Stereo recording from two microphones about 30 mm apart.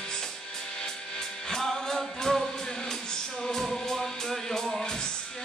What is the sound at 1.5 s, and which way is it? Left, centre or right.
Music, centre.